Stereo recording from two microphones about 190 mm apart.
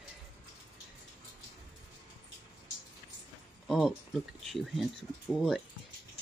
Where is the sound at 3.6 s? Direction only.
Centre (ahead or behind).